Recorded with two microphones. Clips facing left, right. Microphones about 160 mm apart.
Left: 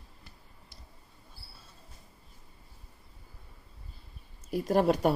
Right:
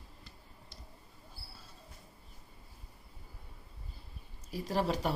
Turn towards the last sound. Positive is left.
turn(degrees=55)  # may be behind; listen again after turning